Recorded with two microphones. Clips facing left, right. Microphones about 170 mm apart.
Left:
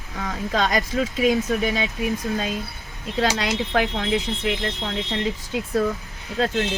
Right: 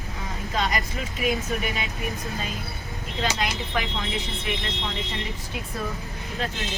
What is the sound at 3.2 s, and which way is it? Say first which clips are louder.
Speech: left 5 dB; 90° left.